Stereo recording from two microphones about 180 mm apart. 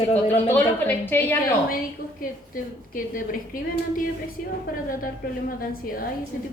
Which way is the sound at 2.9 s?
50° left (ahead or behind).